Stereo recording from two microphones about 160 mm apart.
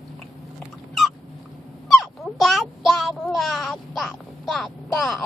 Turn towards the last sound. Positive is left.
turn(degrees=0)  # may be behind; listen again after turning